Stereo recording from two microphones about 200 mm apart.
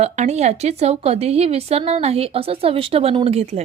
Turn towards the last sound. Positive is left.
turn(degrees=-30)  # may be behind; listen again after turning